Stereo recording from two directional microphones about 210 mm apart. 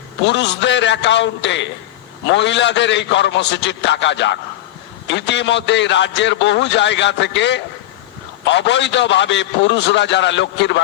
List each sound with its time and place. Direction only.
0.3 s a man's voice: 55° left (ahead or behind)